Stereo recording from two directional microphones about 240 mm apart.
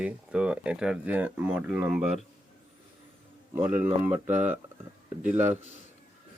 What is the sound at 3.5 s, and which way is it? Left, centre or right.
Speech, centre.